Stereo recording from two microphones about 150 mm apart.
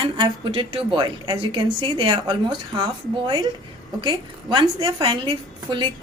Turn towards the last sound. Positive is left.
turn(degrees=-35)  # may be behind; listen again after turning